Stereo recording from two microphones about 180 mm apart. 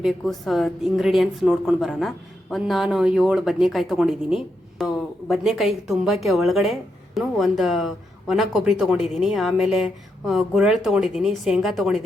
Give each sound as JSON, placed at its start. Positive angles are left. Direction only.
{"t": 0.0, "sound": "a woman's voice", "side_deg": 0}